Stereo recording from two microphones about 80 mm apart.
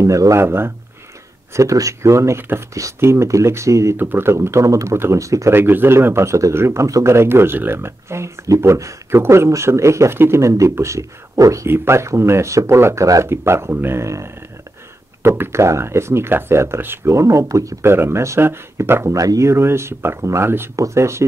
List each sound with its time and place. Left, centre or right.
0.0 s speech: right
1.5 s speech: right
3.9 s speech: right
5.5 s speech: right
11.6 s speech: right
19.1 s speech: right